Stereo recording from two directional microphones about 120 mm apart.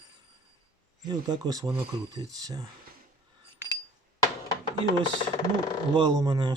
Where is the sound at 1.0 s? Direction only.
35° right (ahead or behind).